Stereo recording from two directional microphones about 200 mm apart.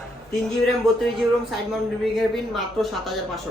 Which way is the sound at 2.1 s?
Centre (ahead or behind).